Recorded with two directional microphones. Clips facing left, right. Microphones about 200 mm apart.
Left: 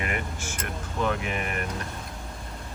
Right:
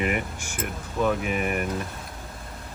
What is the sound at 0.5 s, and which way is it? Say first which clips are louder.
Speech: right 4 dB; 5° right (ahead or behind).